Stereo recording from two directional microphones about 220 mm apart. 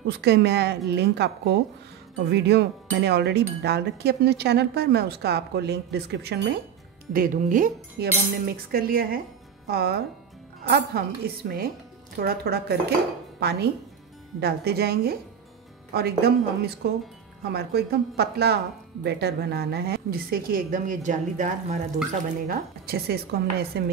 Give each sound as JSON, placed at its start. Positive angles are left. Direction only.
{"t": 0.0, "sound": "speech", "side_deg": -50}
{"t": 7.1, "sound": "speech", "side_deg": -40}